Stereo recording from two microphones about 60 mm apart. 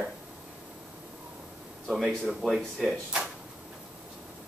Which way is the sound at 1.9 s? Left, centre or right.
Centre.